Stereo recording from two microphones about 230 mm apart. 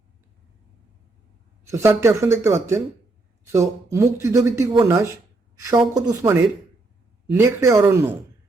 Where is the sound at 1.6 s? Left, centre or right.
Centre.